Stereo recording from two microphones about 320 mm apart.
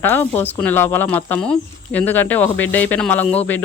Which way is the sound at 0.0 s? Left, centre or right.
Centre.